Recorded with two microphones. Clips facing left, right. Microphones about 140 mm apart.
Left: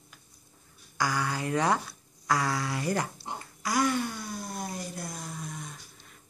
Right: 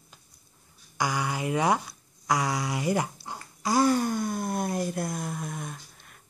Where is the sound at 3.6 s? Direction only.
30° right (ahead or behind).